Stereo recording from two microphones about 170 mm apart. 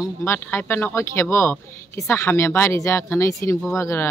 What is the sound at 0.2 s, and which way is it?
Speech, 15° left (ahead or behind).